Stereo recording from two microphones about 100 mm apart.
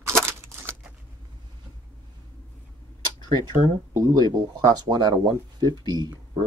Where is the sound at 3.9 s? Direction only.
40° right (ahead or behind).